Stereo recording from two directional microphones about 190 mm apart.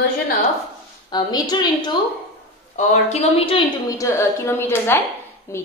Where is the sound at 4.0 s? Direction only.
15° left (ahead or behind).